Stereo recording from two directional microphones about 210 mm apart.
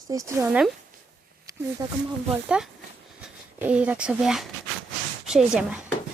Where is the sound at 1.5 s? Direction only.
15° right (ahead or behind).